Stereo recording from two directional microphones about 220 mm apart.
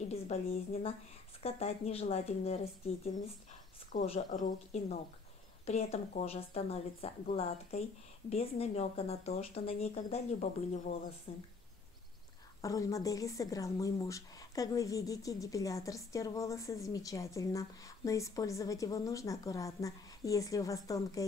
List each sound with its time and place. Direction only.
0.1 s speech: 25° left (ahead or behind)
3.9 s speech: 30° left (ahead or behind)
12.6 s speech: 15° left (ahead or behind)